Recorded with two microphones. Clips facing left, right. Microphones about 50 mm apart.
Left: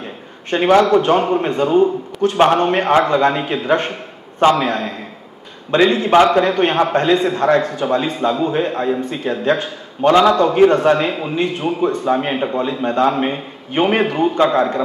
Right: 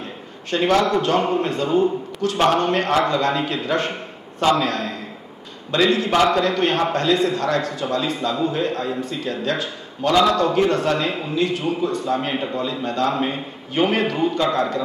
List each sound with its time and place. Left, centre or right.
0.5 s a man's voice: left